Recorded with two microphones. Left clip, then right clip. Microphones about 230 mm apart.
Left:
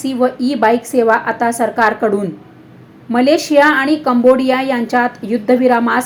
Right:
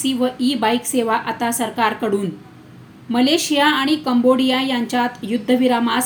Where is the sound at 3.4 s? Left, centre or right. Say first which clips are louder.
Left 6 dB; centre.